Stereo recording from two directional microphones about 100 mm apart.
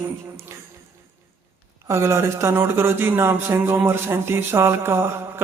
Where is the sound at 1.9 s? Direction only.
25° right (ahead or behind).